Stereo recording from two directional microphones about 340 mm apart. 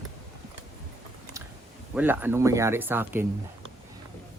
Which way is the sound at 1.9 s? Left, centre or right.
Centre.